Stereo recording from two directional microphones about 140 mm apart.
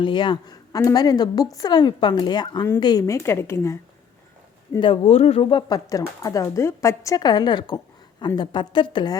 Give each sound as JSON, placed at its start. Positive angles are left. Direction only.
{"t": 0.0, "sound": "speech", "side_deg": 35}
{"t": 4.8, "sound": "speech", "side_deg": 40}